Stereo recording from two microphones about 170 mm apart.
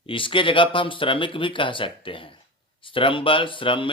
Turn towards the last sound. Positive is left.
turn(degrees=30)  # may be behind; listen again after turning